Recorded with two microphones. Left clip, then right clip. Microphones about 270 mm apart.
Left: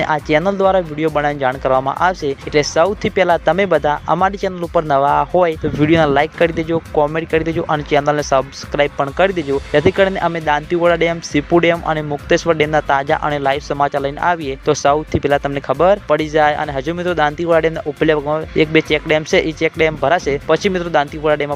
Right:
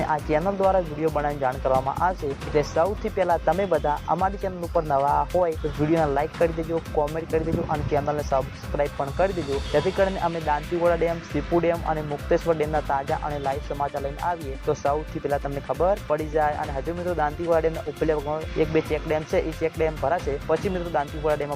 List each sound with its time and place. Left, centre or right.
0.0 s speech: left